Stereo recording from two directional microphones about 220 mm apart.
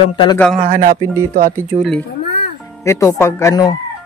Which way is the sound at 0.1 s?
20° left (ahead or behind).